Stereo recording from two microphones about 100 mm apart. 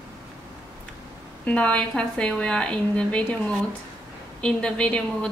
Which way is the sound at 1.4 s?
15° left (ahead or behind).